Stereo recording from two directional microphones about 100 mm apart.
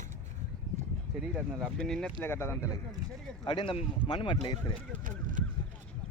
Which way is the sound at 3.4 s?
50° left (ahead or behind).